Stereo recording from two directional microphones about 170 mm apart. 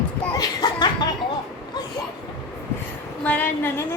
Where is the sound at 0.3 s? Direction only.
25° left (ahead or behind).